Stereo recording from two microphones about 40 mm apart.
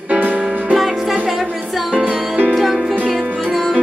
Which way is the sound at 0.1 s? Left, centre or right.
Right.